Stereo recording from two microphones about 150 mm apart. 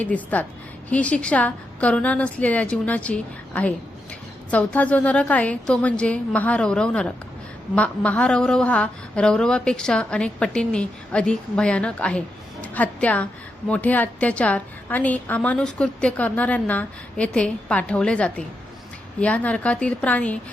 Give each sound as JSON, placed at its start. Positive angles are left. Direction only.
{"t": 0.0, "sound": "a woman's voice", "side_deg": 10}